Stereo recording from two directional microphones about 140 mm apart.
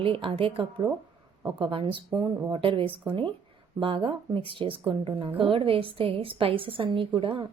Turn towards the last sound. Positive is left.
turn(degrees=-35)  # may be behind; listen again after turning